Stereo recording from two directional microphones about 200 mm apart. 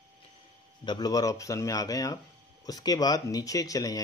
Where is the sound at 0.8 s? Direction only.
20° left (ahead or behind).